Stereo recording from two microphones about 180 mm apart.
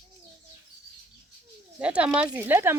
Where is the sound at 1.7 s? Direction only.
5° right (ahead or behind).